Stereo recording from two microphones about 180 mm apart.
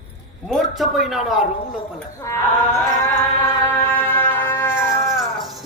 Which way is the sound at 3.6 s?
10° left (ahead or behind).